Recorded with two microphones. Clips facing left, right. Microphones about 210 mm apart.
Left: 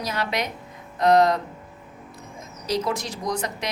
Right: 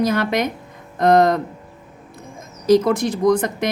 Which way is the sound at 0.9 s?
50° right (ahead or behind).